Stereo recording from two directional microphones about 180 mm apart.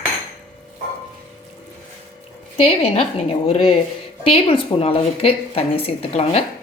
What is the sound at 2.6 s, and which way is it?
A woman's voice, 35° left (ahead or behind).